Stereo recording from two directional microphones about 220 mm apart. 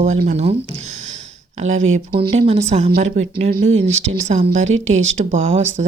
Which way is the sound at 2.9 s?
40° right (ahead or behind).